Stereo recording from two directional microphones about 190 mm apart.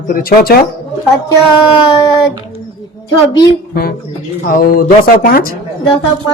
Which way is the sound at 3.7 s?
50° left (ahead or behind).